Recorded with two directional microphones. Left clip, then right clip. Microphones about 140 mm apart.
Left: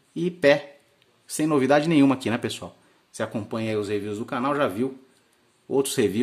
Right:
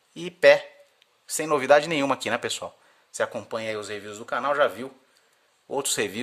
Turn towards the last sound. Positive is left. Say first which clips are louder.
# left 4 dB
turn(degrees=-25)  # may be behind; listen again after turning